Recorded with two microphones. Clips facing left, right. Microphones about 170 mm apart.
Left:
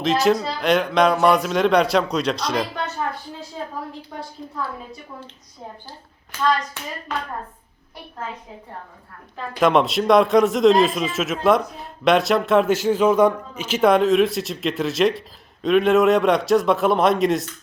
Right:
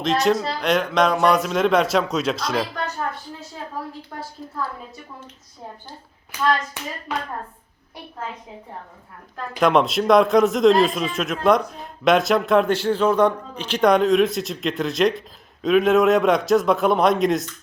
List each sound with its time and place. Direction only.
0.0 s a man's voice: centre (ahead or behind)
6.3 s hands: 15° right (ahead or behind)
9.6 s a man's voice: centre (ahead or behind)